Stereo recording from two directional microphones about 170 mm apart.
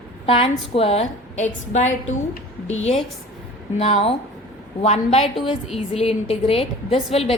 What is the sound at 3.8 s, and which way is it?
A woman's voice, 35° left (ahead or behind).